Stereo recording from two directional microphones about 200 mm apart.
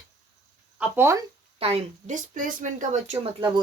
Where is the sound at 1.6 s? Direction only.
30° right (ahead or behind).